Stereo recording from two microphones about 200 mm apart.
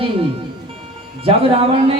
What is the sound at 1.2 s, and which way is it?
Speech, 30° right (ahead or behind).